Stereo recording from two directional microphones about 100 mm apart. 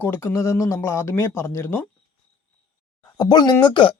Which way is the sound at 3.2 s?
45° left (ahead or behind).